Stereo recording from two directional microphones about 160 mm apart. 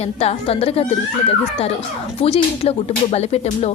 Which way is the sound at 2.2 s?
40° left (ahead or behind).